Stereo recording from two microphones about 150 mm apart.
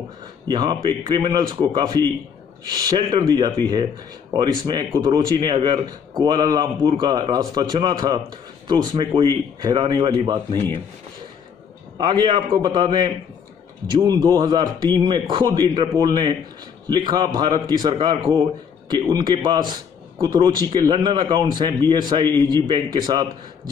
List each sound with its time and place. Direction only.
0.5 s a man's voice: 30° right (ahead or behind)
12.0 s a man's voice: 30° right (ahead or behind)